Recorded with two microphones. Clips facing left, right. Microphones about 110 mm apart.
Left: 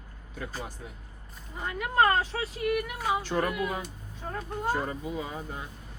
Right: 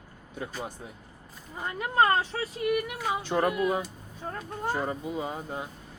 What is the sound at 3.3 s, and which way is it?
Speech, 25° right (ahead or behind).